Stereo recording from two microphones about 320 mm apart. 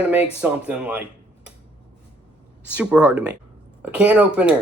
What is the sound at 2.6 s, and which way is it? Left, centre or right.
Speech, centre.